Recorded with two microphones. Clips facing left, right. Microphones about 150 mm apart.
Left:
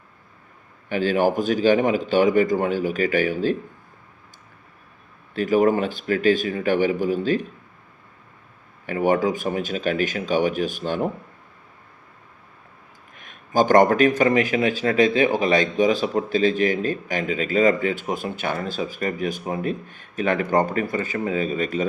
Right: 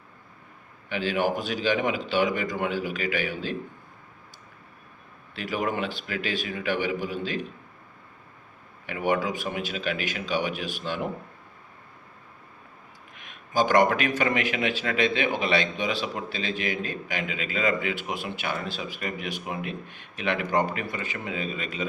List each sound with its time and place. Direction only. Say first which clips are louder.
0.9 s a man's voice: left 6 dB; 45° left (ahead or behind)
5.3 s a man's voice: left 10 dB; 45° left (ahead or behind)
8.9 s a man's voice: left 6 dB; 45° left (ahead or behind)
13.1 s a man's voice: left 5 dB; 45° left (ahead or behind)